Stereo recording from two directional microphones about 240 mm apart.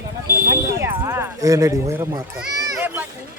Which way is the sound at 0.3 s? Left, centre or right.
Centre.